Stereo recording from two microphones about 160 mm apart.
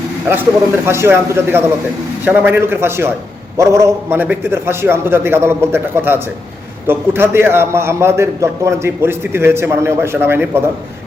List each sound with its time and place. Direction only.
0.9 s a man's voice: 15° right (ahead or behind)